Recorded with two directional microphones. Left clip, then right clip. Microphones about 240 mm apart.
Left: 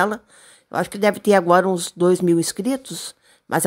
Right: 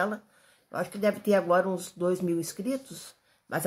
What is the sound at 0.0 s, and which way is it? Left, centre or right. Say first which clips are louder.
Speech: left 9 dB; left.